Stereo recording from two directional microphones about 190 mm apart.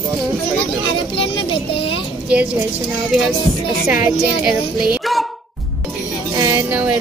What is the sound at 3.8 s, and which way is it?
Speech, 5° right (ahead or behind).